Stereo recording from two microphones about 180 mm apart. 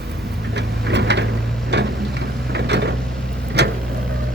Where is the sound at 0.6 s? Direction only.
70° right (ahead or behind).